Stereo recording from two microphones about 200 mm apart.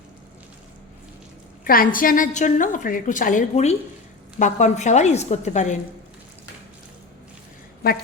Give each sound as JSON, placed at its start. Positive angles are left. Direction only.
{"t": 1.6, "sound": "a woman's voice", "side_deg": 45}